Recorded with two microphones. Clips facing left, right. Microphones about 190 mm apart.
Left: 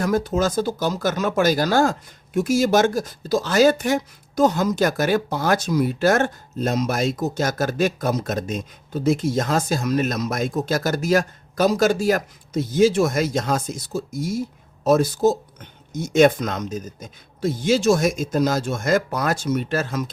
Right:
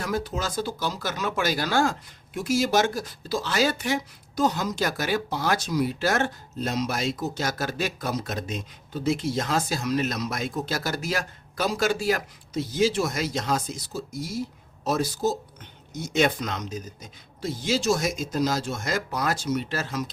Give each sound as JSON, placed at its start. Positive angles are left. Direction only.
{"t": 0.0, "sound": "speech", "side_deg": 45}